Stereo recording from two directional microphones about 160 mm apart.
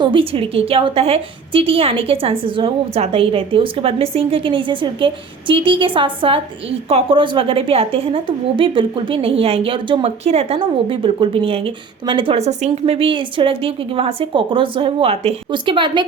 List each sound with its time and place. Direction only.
0.0 s a woman's voice: 35° right (ahead or behind)